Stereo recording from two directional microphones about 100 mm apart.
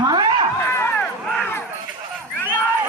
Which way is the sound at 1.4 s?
20° left (ahead or behind).